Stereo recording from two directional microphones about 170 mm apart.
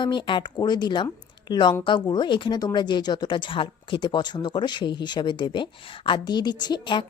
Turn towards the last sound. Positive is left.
turn(degrees=25)  # may be behind; listen again after turning